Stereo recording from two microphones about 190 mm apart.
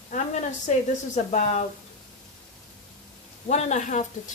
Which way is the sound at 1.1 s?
35° left (ahead or behind).